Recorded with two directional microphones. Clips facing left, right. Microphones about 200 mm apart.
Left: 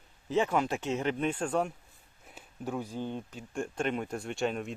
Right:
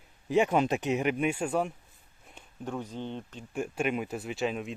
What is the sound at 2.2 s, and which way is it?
Speech, 5° left (ahead or behind).